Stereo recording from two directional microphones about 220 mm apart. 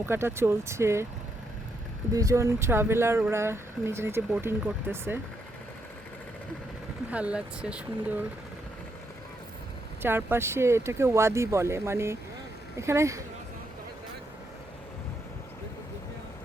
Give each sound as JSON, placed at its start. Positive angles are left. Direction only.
{"t": 0.0, "sound": "speech", "side_deg": -10}
{"t": 2.1, "sound": "speech", "side_deg": -15}
{"t": 7.1, "sound": "speech", "side_deg": -5}
{"t": 10.0, "sound": "speech", "side_deg": -10}